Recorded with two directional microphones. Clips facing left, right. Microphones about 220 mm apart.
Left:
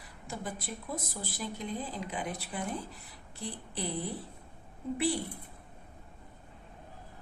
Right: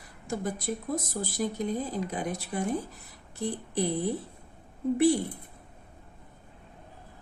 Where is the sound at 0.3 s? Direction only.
45° right (ahead or behind).